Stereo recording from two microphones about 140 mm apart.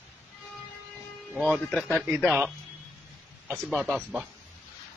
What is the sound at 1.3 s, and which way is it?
Speech, centre (ahead or behind).